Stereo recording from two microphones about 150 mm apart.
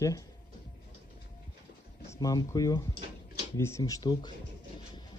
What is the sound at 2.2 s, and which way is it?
Speech, 25° left (ahead or behind).